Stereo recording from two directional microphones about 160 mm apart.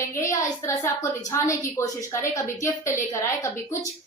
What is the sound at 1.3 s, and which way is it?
A woman's voice, 15° left (ahead or behind).